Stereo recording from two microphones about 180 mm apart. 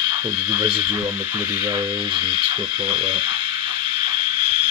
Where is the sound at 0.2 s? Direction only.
25° right (ahead or behind).